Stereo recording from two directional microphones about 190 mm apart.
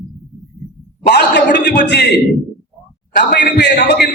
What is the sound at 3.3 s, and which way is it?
Speech, 65° left (ahead or behind).